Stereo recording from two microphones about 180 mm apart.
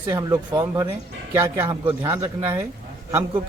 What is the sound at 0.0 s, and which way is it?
Speech, 20° right (ahead or behind).